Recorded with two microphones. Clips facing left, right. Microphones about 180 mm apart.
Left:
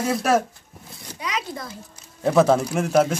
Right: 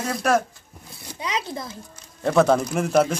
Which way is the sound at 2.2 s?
5° left (ahead or behind).